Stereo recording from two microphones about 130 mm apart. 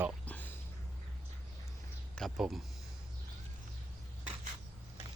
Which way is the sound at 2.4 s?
Centre (ahead or behind).